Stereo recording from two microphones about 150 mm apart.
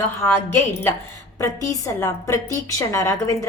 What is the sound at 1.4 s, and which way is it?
A woman's voice, 20° left (ahead or behind).